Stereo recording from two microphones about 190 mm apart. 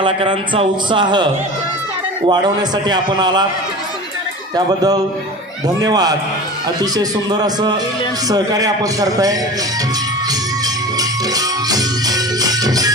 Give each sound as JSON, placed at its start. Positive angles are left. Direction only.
{"t": 0.0, "sound": "speech", "side_deg": -25}
{"t": 4.5, "sound": "speech", "side_deg": -20}
{"t": 11.3, "sound": "music", "side_deg": -20}